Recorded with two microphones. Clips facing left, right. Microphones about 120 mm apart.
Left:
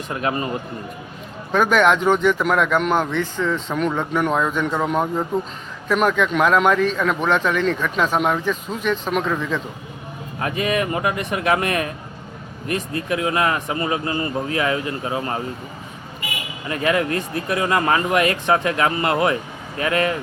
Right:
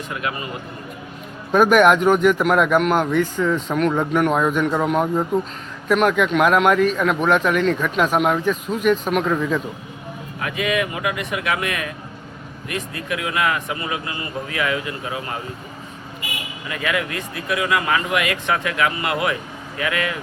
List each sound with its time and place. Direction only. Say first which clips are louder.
0.1 s a man's voice: left 5 dB; 35° left (ahead or behind)
1.5 s speech: right 3 dB; 10° right (ahead or behind)
10.4 s a man's voice: left 1 dB; 40° left (ahead or behind)
16.6 s a man's voice: left 4 dB; 35° left (ahead or behind)